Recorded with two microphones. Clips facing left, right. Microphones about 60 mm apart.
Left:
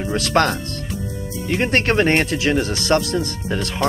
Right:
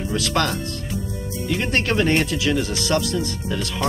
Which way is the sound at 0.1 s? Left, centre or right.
Left.